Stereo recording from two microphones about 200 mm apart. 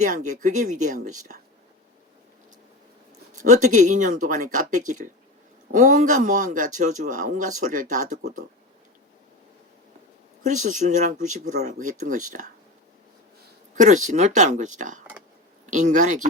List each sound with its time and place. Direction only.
0.0 s speech: 40° right (ahead or behind)
3.3 s speech: 40° right (ahead or behind)
10.4 s speech: 40° right (ahead or behind)
13.7 s speech: 40° right (ahead or behind)